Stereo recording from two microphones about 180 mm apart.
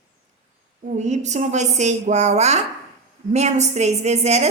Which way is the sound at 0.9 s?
40° right (ahead or behind).